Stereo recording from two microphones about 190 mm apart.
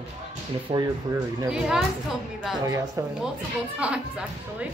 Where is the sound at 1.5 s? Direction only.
5° right (ahead or behind).